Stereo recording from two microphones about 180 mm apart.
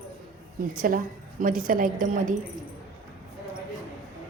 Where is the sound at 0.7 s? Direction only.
50° right (ahead or behind).